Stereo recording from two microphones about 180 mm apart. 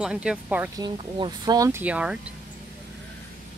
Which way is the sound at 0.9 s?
25° right (ahead or behind).